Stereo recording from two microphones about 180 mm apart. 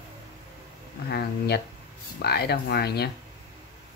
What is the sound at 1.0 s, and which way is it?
Speech, 60° left (ahead or behind).